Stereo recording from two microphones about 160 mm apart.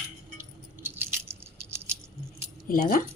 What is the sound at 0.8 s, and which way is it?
Rattle, 15° right (ahead or behind).